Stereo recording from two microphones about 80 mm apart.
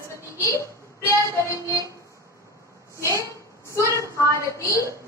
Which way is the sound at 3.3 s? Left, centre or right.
Left.